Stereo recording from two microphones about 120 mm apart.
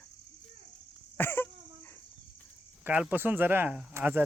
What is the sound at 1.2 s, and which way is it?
Cough, 15° left (ahead or behind).